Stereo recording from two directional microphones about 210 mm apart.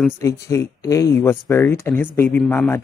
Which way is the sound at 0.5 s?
15° left (ahead or behind).